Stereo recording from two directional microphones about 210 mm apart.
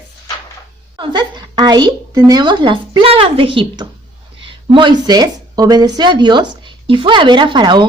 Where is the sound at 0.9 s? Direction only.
20° right (ahead or behind).